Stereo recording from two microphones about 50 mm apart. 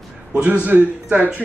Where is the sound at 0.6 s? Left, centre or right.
Right.